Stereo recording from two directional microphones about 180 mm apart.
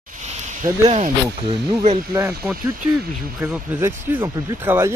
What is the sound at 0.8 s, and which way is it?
Speech, 40° right (ahead or behind).